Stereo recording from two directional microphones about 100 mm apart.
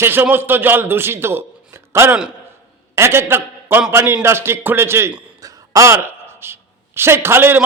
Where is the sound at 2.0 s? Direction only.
10° right (ahead or behind).